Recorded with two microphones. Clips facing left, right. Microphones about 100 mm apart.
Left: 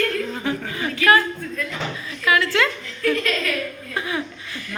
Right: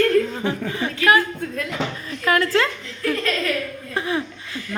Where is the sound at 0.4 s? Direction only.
30° right (ahead or behind).